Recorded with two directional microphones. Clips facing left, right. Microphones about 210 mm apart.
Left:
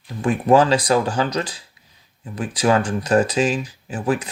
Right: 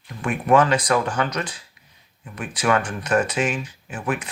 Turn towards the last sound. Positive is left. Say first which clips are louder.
# left 5 dB
turn(degrees=35)  # may be behind; listen again after turning